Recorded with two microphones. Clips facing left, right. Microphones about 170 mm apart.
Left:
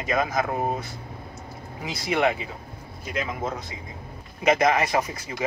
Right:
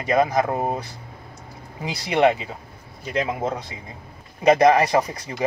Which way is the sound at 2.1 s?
30° right (ahead or behind).